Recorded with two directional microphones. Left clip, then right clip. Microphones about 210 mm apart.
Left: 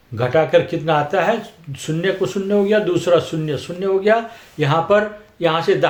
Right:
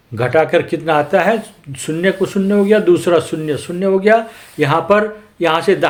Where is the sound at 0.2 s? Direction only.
30° right (ahead or behind).